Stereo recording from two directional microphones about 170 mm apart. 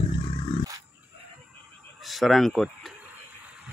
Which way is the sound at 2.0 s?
Centre (ahead or behind).